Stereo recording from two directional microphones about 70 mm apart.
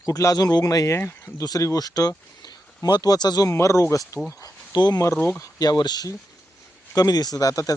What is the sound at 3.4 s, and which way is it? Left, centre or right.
Speech, left.